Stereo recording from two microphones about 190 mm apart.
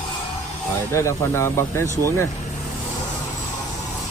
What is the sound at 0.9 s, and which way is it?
Speech, 15° left (ahead or behind).